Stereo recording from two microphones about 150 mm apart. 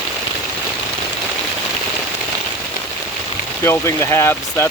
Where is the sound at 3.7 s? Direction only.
20° left (ahead or behind).